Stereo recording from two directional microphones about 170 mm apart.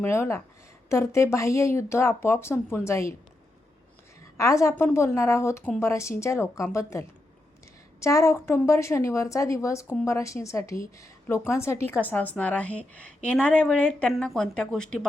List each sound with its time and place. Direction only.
0.0 s a woman's voice: 15° left (ahead or behind)
4.4 s a woman's voice: 15° left (ahead or behind)
8.0 s a woman's voice: 15° left (ahead or behind)